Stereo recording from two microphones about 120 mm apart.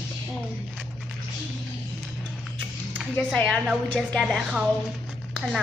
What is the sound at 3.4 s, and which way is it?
Speech, 5° left (ahead or behind).